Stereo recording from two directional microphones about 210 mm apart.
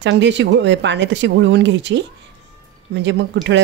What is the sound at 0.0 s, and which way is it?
Speech, 60° right (ahead or behind).